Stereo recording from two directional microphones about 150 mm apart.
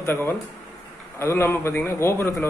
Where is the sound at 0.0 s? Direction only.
15° left (ahead or behind).